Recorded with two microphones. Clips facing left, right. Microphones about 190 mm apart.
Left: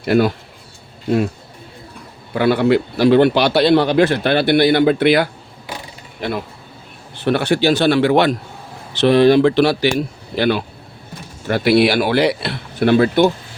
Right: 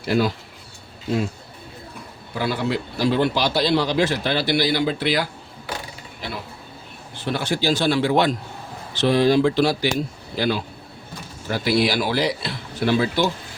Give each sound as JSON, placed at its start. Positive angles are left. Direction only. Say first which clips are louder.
{"t": 0.1, "sound": "a man's voice", "louder": "left 6 dB", "side_deg": 60}
{"t": 2.3, "sound": "a man's voice", "louder": "left 10 dB", "side_deg": 65}